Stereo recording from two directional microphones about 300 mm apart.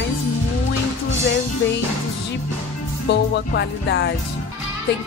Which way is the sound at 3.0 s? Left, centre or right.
Left.